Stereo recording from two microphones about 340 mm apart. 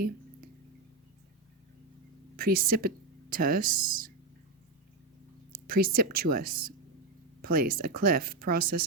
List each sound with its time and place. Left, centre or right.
2.3 s speech: right
5.6 s speech: right